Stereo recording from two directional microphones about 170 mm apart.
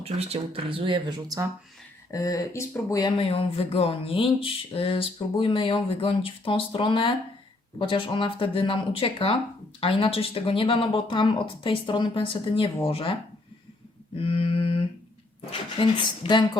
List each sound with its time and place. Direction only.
0.0 s speech: 35° right (ahead or behind)
2.0 s speech: 20° left (ahead or behind)
14.2 s speech: 30° left (ahead or behind)